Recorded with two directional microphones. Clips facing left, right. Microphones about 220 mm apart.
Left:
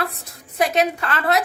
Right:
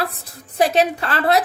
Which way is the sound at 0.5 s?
30° right (ahead or behind).